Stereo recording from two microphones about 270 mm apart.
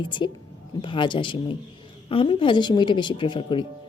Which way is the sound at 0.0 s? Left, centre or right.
Centre.